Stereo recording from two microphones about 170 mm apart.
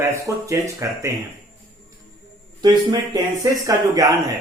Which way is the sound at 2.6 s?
25° right (ahead or behind).